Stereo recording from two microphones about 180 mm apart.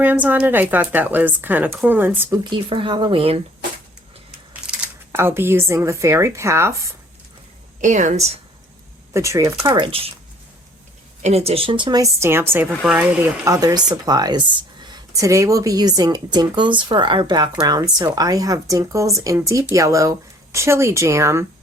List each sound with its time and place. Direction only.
0.0 s speech: 10° right (ahead or behind)
2.4 s speech: 25° right (ahead or behind)
4.6 s speech: 5° right (ahead or behind)
7.8 s speech: 45° right (ahead or behind)
9.1 s speech: 15° right (ahead or behind)
11.2 s speech: 35° right (ahead or behind); by 21.4 s 15° right (ahead or behind)